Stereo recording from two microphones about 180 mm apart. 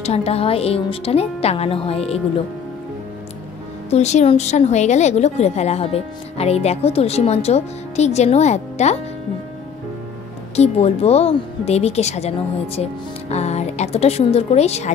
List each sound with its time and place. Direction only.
0.0 s a woman's voice: 35° left (ahead or behind)
3.9 s a woman's voice: 40° left (ahead or behind)
10.5 s a woman's voice: 35° left (ahead or behind)